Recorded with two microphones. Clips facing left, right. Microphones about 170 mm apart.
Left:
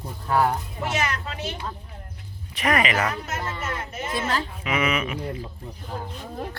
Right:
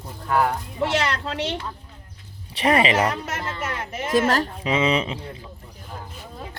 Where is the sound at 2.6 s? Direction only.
30° right (ahead or behind).